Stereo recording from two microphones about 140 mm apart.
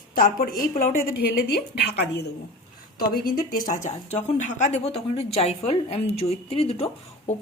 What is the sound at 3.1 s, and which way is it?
Speech, 90° left.